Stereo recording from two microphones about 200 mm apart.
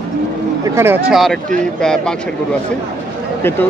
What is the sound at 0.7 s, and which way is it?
Speech, 10° right (ahead or behind).